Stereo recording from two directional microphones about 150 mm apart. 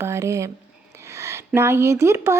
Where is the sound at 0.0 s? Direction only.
20° right (ahead or behind).